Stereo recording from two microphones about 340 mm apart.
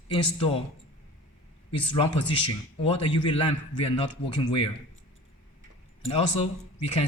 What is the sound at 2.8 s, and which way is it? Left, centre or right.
Speech, centre.